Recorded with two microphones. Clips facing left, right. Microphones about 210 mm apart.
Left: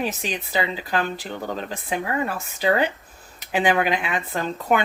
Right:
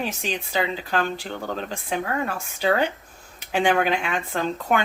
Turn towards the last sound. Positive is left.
turn(degrees=5)  # may be behind; listen again after turning